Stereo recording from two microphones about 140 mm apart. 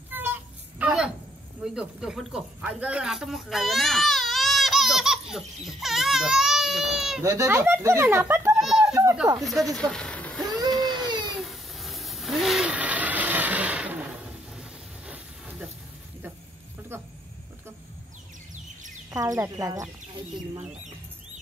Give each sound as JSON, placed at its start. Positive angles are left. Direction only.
{"t": 0.1, "sound": "a sound", "side_deg": -15}
{"t": 1.6, "sound": "speech", "side_deg": -5}
{"t": 7.2, "sound": "speech", "side_deg": -20}
{"t": 8.5, "sound": "children playing", "side_deg": -5}
{"t": 9.4, "sound": "speech", "side_deg": 0}
{"t": 9.8, "sound": "a sound", "side_deg": 5}
{"t": 10.7, "sound": "baby cry", "side_deg": 0}
{"t": 11.3, "sound": "vehicle", "side_deg": 0}
{"t": 16.9, "sound": "a sound", "side_deg": -15}
{"t": 19.0, "sound": "speech", "side_deg": -25}